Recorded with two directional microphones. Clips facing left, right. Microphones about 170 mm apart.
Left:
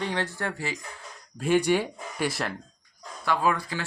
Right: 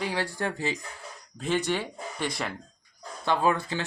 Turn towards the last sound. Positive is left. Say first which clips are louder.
# right 1 dB
turn(degrees=-25)  # may be behind; listen again after turning